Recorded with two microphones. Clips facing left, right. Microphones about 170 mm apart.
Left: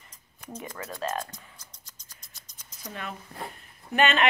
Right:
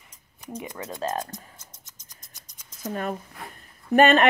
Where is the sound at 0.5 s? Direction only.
15° right (ahead or behind).